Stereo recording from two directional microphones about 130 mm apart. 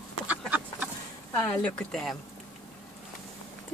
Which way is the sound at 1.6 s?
5° left (ahead or behind).